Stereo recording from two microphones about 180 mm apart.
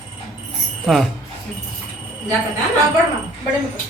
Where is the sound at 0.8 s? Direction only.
Centre (ahead or behind).